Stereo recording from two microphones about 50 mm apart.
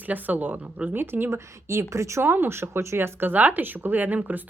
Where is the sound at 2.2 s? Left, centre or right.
Right.